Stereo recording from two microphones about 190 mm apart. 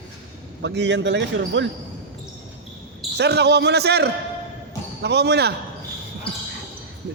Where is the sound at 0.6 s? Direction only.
65° right (ahead or behind).